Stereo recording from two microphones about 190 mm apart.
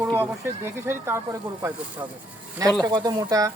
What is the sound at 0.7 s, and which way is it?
Speech, 10° right (ahead or behind).